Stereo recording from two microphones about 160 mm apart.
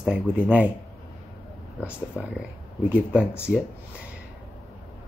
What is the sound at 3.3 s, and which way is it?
Speech, 15° left (ahead or behind).